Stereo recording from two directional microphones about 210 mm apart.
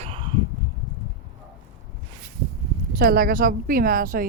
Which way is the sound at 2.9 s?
45° right (ahead or behind).